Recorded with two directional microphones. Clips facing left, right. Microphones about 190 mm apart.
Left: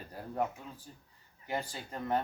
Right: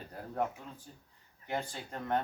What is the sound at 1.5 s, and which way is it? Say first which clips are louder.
Speech: even; centre (ahead or behind).